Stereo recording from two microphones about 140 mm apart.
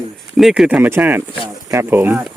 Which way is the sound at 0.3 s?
Centre (ahead or behind).